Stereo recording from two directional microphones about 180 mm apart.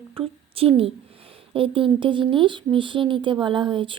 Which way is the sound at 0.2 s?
30° right (ahead or behind).